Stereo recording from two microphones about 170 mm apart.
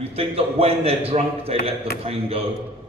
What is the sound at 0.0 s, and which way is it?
A man's voice, 35° right (ahead or behind).